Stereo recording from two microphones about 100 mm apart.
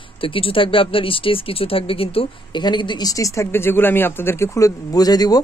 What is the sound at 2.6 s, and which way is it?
Speech, 50° left (ahead or behind).